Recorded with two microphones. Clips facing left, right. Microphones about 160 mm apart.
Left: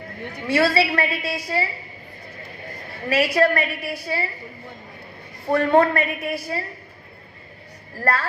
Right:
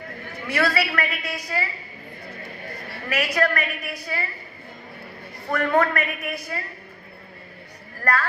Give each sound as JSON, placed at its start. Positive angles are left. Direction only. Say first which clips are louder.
{"t": 0.4, "sound": "a woman's voice", "louder": "left 4 dB", "side_deg": 30}
{"t": 3.1, "sound": "a woman's voice", "louder": "left 5 dB", "side_deg": 30}
{"t": 5.5, "sound": "a woman's voice", "louder": "left 4 dB", "side_deg": 30}
{"t": 7.9, "sound": "a woman's voice", "louder": "left 1 dB", "side_deg": 30}